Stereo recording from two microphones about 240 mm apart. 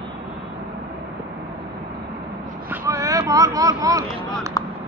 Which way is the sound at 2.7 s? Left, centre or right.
Centre.